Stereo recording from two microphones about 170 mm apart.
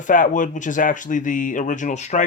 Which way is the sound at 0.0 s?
50° left (ahead or behind).